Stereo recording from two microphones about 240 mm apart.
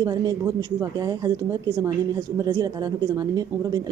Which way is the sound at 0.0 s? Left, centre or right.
Centre.